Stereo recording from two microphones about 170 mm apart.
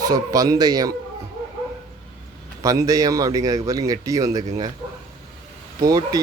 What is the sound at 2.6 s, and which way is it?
Speech, 20° right (ahead or behind).